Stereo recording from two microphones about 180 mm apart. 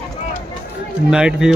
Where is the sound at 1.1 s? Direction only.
5° right (ahead or behind).